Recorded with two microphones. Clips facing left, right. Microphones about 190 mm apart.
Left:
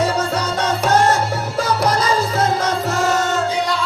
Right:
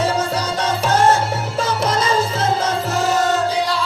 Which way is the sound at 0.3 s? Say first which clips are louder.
Left 1 dB; 30° right (ahead or behind).